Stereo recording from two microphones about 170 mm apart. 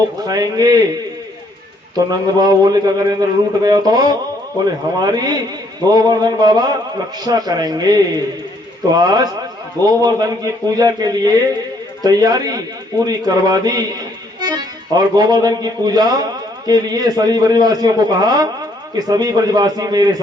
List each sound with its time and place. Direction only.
0.3 s a man's voice: 25° right (ahead or behind)
2.0 s a man's voice: 20° right (ahead or behind)